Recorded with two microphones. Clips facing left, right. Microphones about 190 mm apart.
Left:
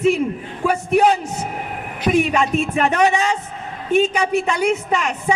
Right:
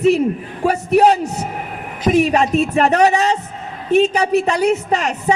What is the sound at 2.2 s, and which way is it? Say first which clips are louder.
A woman's voice: right 4 dB; 35° right (ahead or behind).